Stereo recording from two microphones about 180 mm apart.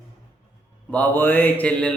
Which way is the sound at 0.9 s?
10° left (ahead or behind).